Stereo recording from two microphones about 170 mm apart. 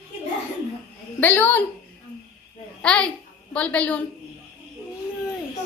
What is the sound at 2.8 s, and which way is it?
A child's voice, 5° left (ahead or behind).